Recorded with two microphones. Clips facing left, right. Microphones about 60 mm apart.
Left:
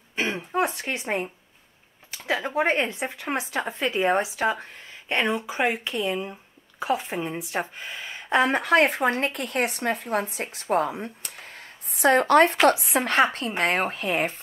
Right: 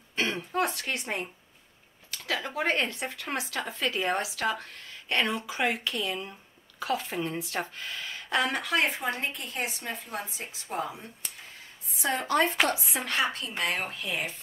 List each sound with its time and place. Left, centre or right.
0.1 s throat clearing: centre
2.1 s a woman's voice: left
12.9 s a woman's voice: left